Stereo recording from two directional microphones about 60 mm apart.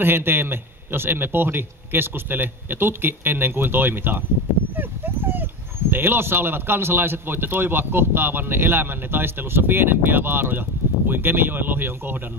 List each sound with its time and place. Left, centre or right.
0.0 s speech: right